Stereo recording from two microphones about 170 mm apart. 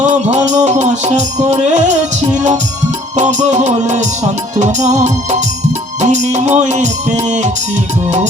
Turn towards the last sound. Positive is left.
turn(degrees=-40)  # may be behind; listen again after turning